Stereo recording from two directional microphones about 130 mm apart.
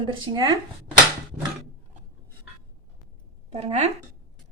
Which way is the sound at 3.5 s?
55° right (ahead or behind).